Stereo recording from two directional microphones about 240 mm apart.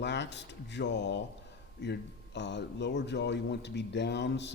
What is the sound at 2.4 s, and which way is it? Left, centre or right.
Speech, left.